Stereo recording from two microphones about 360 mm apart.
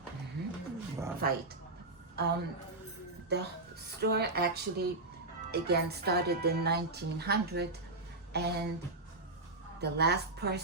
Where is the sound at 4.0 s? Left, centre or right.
Right.